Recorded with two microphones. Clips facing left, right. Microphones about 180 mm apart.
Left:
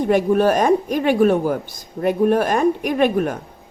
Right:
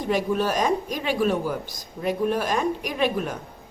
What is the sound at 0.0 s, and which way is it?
Speech, 55° left (ahead or behind).